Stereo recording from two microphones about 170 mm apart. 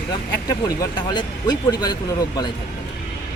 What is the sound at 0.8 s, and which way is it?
Speech, 25° left (ahead or behind).